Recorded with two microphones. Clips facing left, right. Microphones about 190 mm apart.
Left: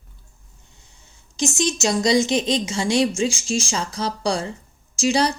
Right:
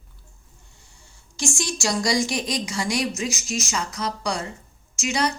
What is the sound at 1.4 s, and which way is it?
A woman's voice, 20° left (ahead or behind).